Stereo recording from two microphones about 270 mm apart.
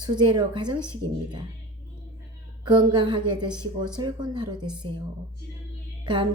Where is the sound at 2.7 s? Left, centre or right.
Centre.